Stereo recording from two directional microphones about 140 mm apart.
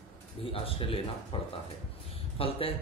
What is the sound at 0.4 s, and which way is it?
A man's voice, 40° left (ahead or behind).